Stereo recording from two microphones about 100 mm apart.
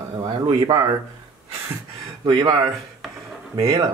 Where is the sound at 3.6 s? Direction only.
35° right (ahead or behind).